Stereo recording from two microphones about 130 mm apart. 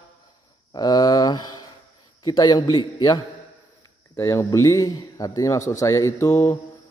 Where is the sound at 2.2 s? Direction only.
30° left (ahead or behind).